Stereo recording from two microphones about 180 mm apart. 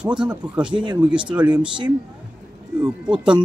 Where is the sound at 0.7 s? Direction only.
25° right (ahead or behind).